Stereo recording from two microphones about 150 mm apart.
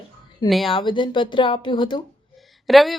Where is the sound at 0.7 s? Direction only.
35° left (ahead or behind).